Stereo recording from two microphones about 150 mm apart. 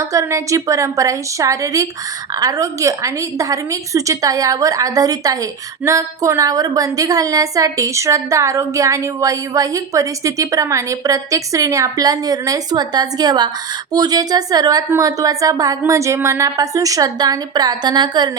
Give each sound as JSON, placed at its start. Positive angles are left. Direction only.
{"t": 0.0, "sound": "a woman's voice", "side_deg": -20}